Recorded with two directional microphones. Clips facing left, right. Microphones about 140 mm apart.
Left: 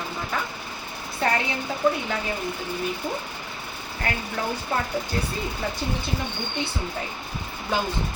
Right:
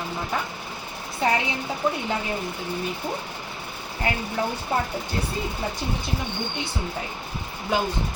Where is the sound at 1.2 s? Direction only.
20° right (ahead or behind).